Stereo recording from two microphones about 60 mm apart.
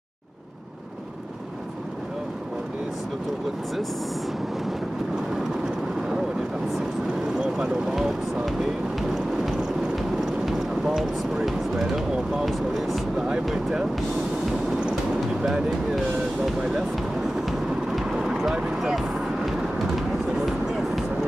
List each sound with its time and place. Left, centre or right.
7.3 s speech: centre
9.1 s a sound: centre
11.4 s speech: centre
14.7 s train: centre
15.4 s speech: centre
17.5 s vehicle: centre